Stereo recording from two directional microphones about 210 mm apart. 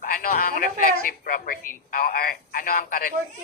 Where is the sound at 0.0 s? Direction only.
40° left (ahead or behind).